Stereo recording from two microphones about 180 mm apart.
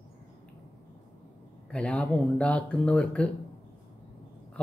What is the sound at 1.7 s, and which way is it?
Speech, 5° left (ahead or behind).